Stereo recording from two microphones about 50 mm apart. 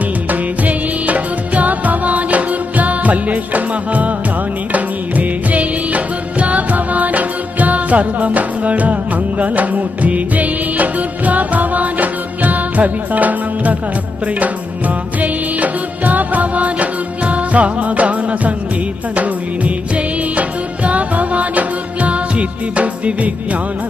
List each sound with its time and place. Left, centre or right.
0.3 s music: right
15.2 s music: right
19.1 s music of bollywood: right
20.8 s music: right